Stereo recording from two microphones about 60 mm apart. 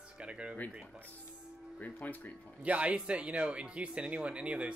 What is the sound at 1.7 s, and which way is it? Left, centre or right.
Speech, left.